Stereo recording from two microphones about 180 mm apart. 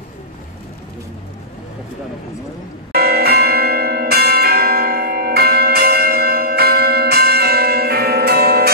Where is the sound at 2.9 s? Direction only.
60° right (ahead or behind).